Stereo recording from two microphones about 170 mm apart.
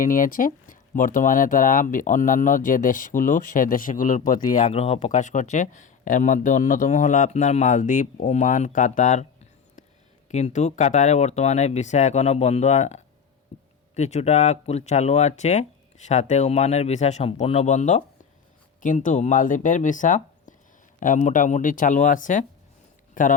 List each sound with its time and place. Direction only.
0.0 s speech: 50° left (ahead or behind)
4.7 s speech: 35° left (ahead or behind)
10.3 s speech: 40° left (ahead or behind)
13.5 s a sound: 40° left (ahead or behind)
13.9 s speech: 40° left (ahead or behind)